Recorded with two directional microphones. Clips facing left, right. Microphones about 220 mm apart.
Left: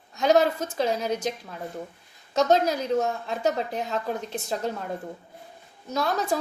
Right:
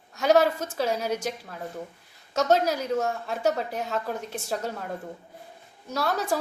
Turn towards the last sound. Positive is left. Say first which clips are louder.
# left 1 dB
turn(degrees=-10)  # may be behind; listen again after turning